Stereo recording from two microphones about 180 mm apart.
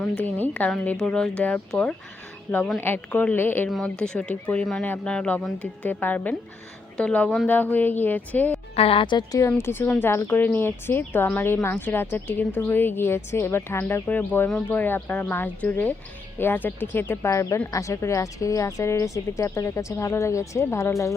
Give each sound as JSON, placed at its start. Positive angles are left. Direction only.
{"t": 0.0, "sound": "a woman's voice", "side_deg": 5}
{"t": 8.7, "sound": "a woman's voice", "side_deg": 30}